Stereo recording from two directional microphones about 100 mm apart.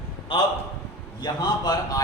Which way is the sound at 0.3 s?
60° left (ahead or behind).